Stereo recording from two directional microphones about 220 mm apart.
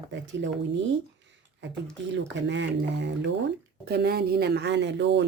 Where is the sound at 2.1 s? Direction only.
55° right (ahead or behind).